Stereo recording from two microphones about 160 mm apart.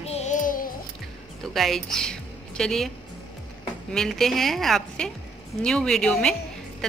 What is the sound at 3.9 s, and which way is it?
A woman's voice, centre (ahead or behind).